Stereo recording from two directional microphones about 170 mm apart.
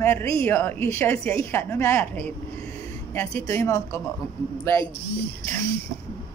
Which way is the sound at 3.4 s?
20° left (ahead or behind).